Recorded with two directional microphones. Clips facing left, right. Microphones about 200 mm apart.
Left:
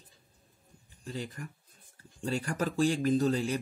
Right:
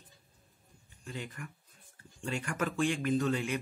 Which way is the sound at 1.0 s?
35° left (ahead or behind).